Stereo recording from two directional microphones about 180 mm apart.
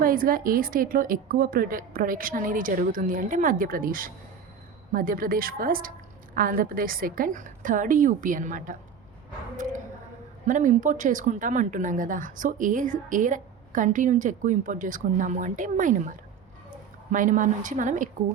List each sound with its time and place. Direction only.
0.0 s a woman's voice: 50° right (ahead or behind)
10.4 s a woman's voice: 45° right (ahead or behind)